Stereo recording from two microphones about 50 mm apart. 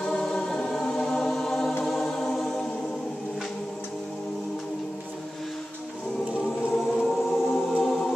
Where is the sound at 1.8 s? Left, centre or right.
Centre.